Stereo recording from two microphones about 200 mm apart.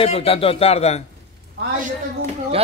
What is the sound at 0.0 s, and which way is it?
Speech, 30° left (ahead or behind).